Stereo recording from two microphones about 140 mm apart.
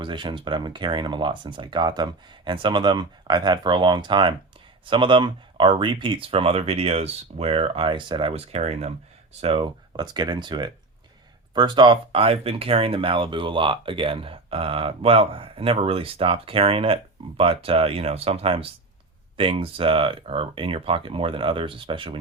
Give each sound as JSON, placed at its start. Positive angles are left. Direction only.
{"t": 0.0, "sound": "speech", "side_deg": -35}
{"t": 8.5, "sound": "speech", "side_deg": -50}